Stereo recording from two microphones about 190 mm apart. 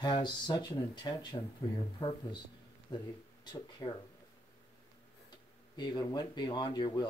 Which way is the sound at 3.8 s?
20° left (ahead or behind).